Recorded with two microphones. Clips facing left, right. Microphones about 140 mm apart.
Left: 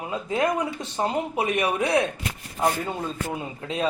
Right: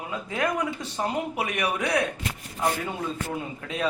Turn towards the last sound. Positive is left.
turn(degrees=25)  # may be behind; listen again after turning